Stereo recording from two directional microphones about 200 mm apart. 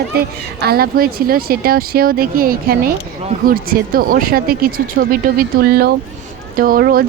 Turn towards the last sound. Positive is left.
turn(degrees=-45)  # may be behind; listen again after turning